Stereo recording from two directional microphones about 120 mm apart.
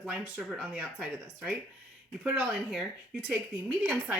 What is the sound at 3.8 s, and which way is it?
Speech, 15° right (ahead or behind).